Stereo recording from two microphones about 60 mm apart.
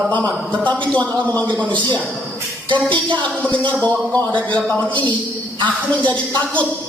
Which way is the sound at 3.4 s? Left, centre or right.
Left.